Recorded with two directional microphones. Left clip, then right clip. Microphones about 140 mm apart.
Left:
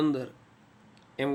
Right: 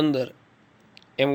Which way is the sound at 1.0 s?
25° right (ahead or behind).